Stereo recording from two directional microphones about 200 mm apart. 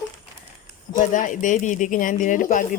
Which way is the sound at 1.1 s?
40° left (ahead or behind).